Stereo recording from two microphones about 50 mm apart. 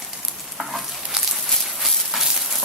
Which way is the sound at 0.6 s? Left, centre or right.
Centre.